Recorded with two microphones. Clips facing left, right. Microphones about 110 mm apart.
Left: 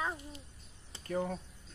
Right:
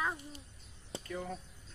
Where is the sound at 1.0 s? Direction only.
45° left (ahead or behind).